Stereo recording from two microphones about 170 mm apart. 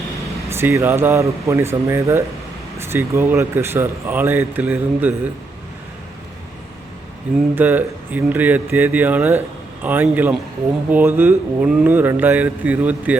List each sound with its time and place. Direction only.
0.5 s speech: 15° right (ahead or behind)
7.5 s speech: 10° right (ahead or behind)